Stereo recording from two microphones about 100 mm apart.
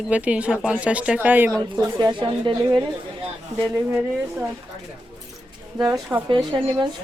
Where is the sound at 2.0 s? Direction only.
50° right (ahead or behind).